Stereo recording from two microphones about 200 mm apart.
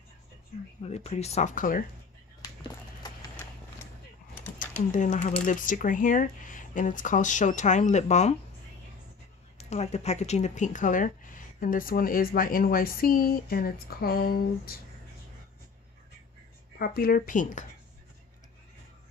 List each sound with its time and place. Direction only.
0.8 s speech: 30° left (ahead or behind)
4.6 s speech: 40° left (ahead or behind)
9.6 s speech: 35° left (ahead or behind); by 14.8 s 50° left (ahead or behind)
16.7 s speech: 50° left (ahead or behind)